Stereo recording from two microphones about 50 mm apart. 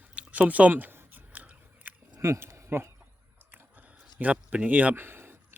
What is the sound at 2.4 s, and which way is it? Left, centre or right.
Speech, right.